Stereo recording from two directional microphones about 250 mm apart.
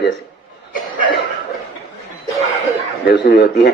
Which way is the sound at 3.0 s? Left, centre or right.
Left.